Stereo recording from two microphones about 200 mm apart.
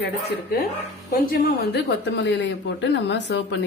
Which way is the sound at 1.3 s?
50° left (ahead or behind).